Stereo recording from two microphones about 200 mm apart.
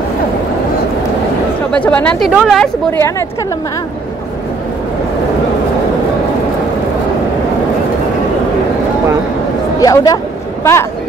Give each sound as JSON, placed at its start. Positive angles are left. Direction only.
{"t": 1.7, "sound": "speech", "side_deg": 5}
{"t": 2.9, "sound": "a woman's voice", "side_deg": 10}
{"t": 9.8, "sound": "speech", "side_deg": 20}